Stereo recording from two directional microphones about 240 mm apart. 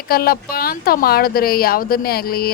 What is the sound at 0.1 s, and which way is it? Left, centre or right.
Speech, left.